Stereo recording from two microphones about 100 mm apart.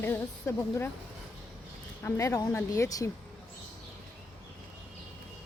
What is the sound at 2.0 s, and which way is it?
Speech, 30° left (ahead or behind).